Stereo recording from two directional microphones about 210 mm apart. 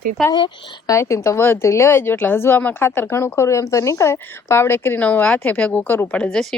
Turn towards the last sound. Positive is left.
turn(degrees=5)  # may be behind; listen again after turning